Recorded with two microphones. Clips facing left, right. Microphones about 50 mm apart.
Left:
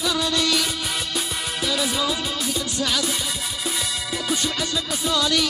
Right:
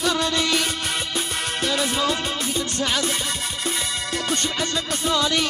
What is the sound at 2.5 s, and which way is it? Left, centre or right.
Music, right.